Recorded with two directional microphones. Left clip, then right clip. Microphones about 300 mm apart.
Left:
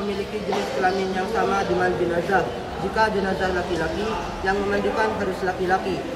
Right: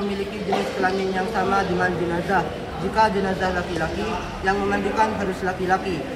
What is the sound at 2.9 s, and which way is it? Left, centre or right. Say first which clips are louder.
A man's voice: right 2 dB; centre.